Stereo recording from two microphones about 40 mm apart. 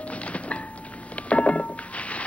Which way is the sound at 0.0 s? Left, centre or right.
Left.